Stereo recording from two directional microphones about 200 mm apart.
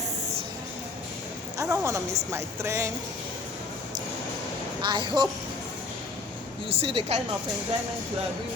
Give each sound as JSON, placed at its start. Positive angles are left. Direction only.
{"t": 1.5, "sound": "a woman's voice", "side_deg": -15}
{"t": 4.8, "sound": "speech", "side_deg": -20}
{"t": 6.7, "sound": "speech", "side_deg": -30}